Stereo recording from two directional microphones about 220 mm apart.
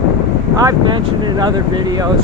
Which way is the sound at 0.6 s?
20° right (ahead or behind).